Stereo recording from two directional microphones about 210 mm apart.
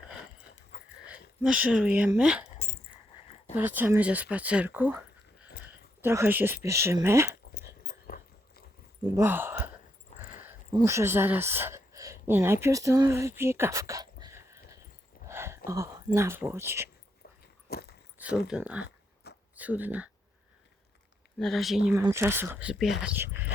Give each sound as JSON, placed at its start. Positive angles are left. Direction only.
{"t": 0.7, "sound": "a sound", "side_deg": 30}
{"t": 1.4, "sound": "speech", "side_deg": -5}
{"t": 3.5, "sound": "speech", "side_deg": -10}
{"t": 7.9, "sound": "dog", "side_deg": 45}
{"t": 9.1, "sound": "speech", "side_deg": -10}
{"t": 10.7, "sound": "speech", "side_deg": -15}
{"t": 17.7, "sound": "a sound", "side_deg": 50}
{"t": 18.2, "sound": "speech", "side_deg": -5}
{"t": 18.9, "sound": "a sound", "side_deg": 55}
{"t": 19.5, "sound": "speech", "side_deg": -10}
{"t": 21.3, "sound": "speech", "side_deg": 0}
{"t": 21.9, "sound": "speech", "side_deg": -15}